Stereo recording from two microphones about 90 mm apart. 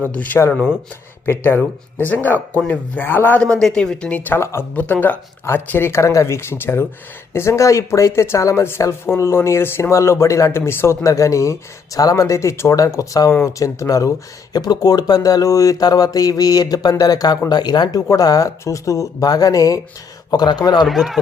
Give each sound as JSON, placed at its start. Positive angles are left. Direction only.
{"t": 1.2, "sound": "speech", "side_deg": 25}
{"t": 3.4, "sound": "speech", "side_deg": 10}
{"t": 4.4, "sound": "speech", "side_deg": 30}
{"t": 4.7, "sound": "speech", "side_deg": 20}
{"t": 20.8, "sound": "speech", "side_deg": 0}